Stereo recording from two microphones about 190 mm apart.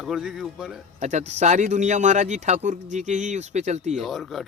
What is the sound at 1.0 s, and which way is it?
Speech, 40° right (ahead or behind).